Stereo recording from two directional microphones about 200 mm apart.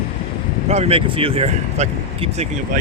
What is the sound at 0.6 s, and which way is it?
Speech, 30° right (ahead or behind).